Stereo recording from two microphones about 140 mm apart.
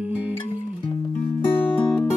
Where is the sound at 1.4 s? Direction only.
15° left (ahead or behind).